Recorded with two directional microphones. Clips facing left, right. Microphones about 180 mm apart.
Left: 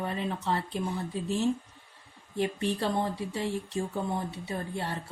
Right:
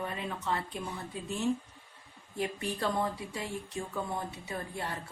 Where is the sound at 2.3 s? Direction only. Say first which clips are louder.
Left 5 dB; 30° left (ahead or behind).